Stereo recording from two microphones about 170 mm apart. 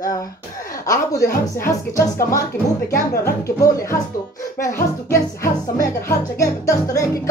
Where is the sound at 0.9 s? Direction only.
15° left (ahead or behind).